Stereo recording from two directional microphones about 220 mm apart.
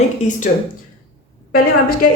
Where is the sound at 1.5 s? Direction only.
40° left (ahead or behind).